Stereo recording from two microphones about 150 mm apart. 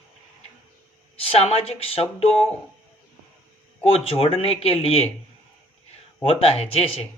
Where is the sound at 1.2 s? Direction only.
40° left (ahead or behind).